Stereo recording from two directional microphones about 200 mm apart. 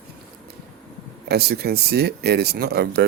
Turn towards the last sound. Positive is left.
turn(degrees=-55)  # may be behind; listen again after turning